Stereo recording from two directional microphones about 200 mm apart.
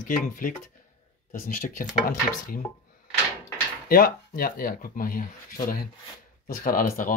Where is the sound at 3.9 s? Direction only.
45° left (ahead or behind).